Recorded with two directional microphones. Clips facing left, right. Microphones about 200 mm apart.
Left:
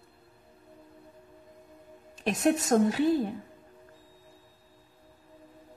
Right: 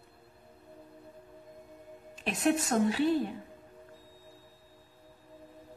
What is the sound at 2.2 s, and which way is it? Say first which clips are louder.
Speech: left 3 dB; 40° left (ahead or behind).